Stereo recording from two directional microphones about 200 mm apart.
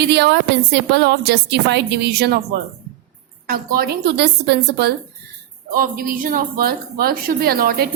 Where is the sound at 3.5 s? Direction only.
50° right (ahead or behind).